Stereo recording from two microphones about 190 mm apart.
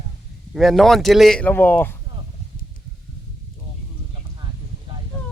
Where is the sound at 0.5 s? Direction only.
Centre (ahead or behind).